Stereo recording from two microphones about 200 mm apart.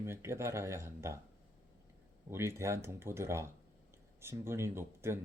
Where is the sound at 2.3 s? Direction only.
15° right (ahead or behind).